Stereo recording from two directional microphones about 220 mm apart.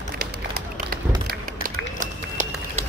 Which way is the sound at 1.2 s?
35° right (ahead or behind).